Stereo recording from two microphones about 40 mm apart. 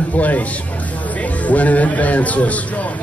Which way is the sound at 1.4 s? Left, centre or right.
Left.